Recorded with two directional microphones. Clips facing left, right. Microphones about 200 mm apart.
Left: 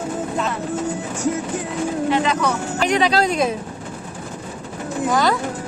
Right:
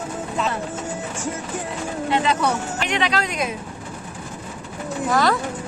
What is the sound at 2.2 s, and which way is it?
Speech, 30° right (ahead or behind).